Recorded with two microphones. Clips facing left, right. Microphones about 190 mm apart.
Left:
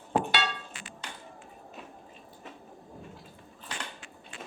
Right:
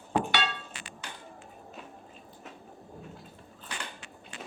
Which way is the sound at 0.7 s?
70° right (ahead or behind).